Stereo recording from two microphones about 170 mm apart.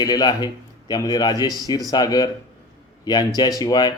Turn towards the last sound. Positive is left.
turn(degrees=25)  # may be behind; listen again after turning